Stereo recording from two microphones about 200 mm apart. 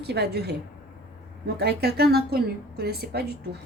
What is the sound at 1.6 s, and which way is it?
A woman's voice, 55° right (ahead or behind).